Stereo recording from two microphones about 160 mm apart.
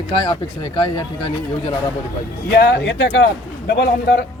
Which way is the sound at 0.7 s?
30° left (ahead or behind).